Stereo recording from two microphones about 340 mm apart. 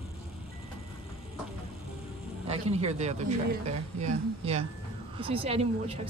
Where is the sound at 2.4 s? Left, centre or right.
Centre.